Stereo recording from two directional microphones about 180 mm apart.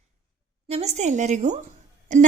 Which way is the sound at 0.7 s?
35° right (ahead or behind).